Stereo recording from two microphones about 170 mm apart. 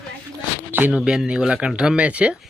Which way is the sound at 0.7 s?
10° right (ahead or behind).